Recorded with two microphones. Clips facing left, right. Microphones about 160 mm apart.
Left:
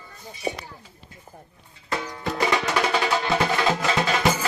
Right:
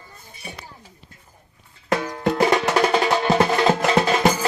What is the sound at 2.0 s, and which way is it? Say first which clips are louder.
Music: right 5 dB; 50° right (ahead or behind).